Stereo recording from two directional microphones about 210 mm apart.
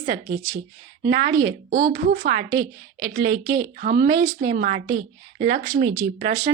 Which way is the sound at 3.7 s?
40° right (ahead or behind).